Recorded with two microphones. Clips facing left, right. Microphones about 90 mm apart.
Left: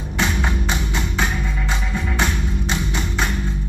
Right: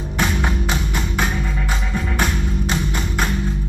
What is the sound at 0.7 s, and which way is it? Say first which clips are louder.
Music: right 1 dB; 20° left (ahead or behind).